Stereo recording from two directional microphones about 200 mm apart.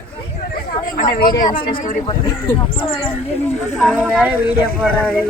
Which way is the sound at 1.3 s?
25° left (ahead or behind).